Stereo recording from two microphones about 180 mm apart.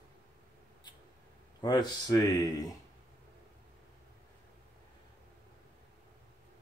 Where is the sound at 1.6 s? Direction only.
25° left (ahead or behind).